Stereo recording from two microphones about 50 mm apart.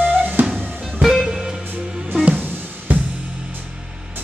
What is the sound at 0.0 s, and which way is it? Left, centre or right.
Music, right.